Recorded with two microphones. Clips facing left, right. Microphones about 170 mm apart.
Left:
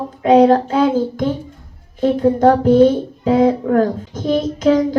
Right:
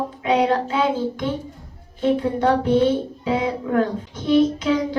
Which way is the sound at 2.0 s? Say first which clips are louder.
Left 6 dB; 40° left (ahead or behind).